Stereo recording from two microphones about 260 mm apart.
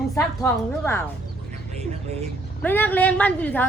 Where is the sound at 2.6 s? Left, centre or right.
Centre.